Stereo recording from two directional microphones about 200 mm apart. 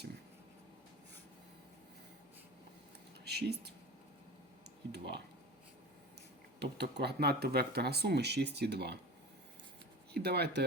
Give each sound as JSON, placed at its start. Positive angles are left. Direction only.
{"t": 3.2, "sound": "speech", "side_deg": -55}
{"t": 4.9, "sound": "speech", "side_deg": -55}
{"t": 6.6, "sound": "speech", "side_deg": -55}
{"t": 10.1, "sound": "speech", "side_deg": -55}